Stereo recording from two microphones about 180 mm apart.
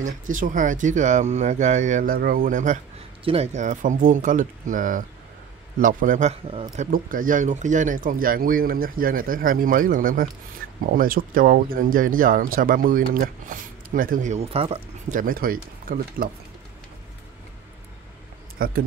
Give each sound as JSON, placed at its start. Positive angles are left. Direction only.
{"t": 0.0, "sound": "a man's voice", "side_deg": -45}
{"t": 6.9, "sound": "speech", "side_deg": -50}
{"t": 18.6, "sound": "speech", "side_deg": -55}